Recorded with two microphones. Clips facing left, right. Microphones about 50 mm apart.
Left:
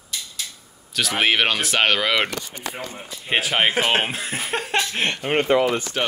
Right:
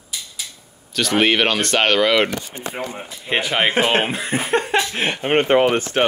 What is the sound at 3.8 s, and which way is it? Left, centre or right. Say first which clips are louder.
Speech: right 3 dB; centre.